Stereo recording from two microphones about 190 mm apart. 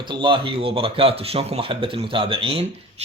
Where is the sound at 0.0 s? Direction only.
25° right (ahead or behind).